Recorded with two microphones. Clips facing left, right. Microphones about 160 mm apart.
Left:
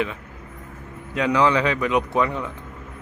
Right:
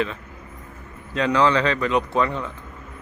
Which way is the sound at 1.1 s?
10° left (ahead or behind).